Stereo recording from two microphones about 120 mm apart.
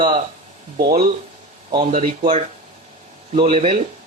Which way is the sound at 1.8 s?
80° right.